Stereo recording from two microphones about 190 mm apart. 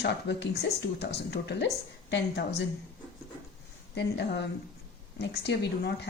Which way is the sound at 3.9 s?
65° left (ahead or behind).